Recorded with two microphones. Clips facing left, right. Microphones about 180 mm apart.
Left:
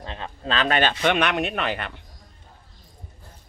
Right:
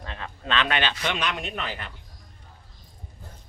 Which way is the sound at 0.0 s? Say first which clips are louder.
Left 3 dB; 30° left (ahead or behind).